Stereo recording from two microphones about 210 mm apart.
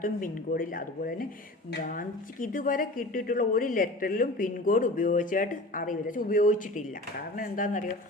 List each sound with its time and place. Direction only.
0.0 s a woman's voice: 40° left (ahead or behind)